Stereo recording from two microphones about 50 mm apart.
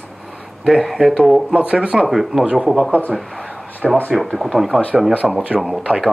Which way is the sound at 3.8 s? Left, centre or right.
Centre.